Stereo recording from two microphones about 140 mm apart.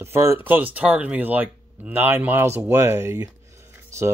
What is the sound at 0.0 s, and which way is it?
Speech, 20° right (ahead or behind).